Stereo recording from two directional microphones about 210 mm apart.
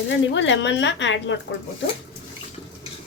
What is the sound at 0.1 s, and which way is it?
Speech, 60° left (ahead or behind).